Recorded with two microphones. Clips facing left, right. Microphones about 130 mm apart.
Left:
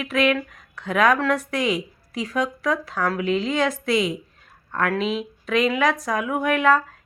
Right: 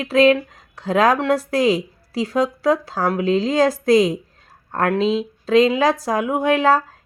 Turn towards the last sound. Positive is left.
turn(degrees=-30)  # may be behind; listen again after turning